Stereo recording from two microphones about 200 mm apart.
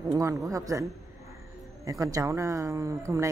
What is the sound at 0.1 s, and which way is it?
A woman's voice, 15° right (ahead or behind).